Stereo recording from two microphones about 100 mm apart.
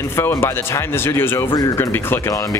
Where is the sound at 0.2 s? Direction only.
25° left (ahead or behind).